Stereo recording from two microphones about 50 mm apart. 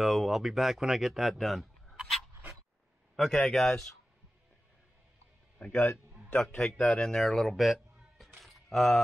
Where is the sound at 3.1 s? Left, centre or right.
Centre.